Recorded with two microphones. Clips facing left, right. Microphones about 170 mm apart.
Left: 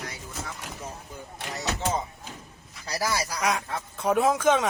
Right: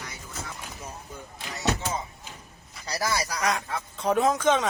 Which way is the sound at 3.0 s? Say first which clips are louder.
Even; 5° left (ahead or behind).